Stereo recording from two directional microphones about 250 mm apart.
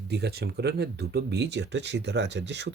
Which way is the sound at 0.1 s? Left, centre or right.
Right.